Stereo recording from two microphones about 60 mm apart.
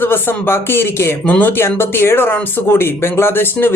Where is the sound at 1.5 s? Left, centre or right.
Left.